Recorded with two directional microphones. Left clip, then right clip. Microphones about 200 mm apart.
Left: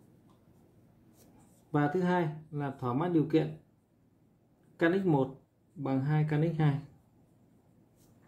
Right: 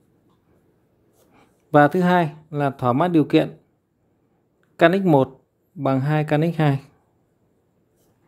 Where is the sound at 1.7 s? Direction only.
60° right (ahead or behind).